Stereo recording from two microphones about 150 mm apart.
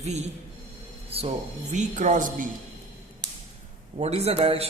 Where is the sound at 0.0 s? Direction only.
50° right (ahead or behind).